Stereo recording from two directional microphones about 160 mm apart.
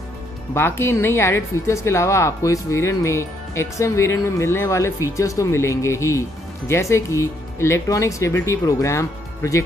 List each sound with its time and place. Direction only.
0.6 s a woman's voice: 15° left (ahead or behind)